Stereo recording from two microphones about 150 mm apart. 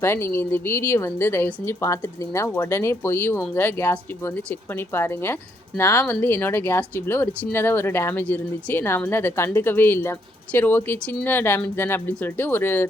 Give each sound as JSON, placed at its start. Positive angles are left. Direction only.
{"t": 0.0, "sound": "speech", "side_deg": 15}